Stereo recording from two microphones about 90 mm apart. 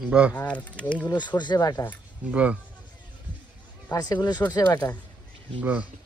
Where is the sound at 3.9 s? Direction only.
50° left (ahead or behind).